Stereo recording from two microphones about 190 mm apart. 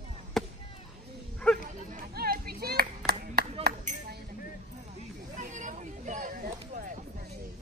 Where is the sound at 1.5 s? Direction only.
Centre (ahead or behind).